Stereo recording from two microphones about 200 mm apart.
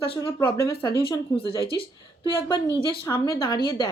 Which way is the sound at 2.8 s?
20° left (ahead or behind).